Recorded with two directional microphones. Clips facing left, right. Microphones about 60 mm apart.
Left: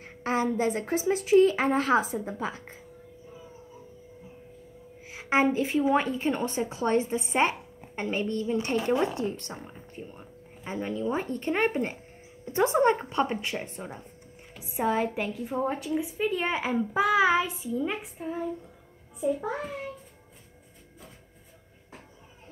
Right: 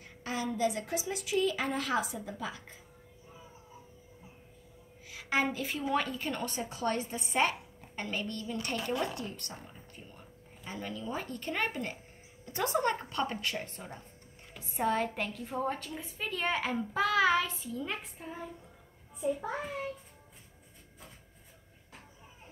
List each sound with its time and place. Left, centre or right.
0.0 s a woman's voice: left
5.0 s speech: left
19.3 s a child's voice: centre